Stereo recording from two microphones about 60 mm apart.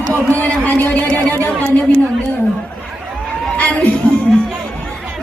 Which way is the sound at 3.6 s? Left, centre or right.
Left.